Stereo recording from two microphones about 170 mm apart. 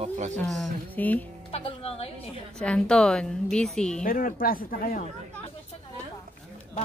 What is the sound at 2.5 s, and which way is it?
A woman's voice, 5° left (ahead or behind).